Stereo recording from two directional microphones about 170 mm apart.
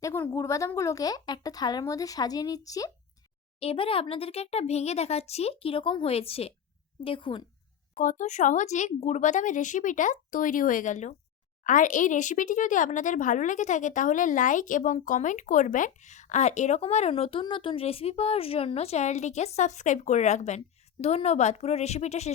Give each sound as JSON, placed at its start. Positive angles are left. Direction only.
{"t": 0.0, "sound": "speech", "side_deg": 15}
{"t": 3.6, "sound": "a child's voice", "side_deg": 35}
{"t": 8.0, "sound": "a child's voice", "side_deg": 45}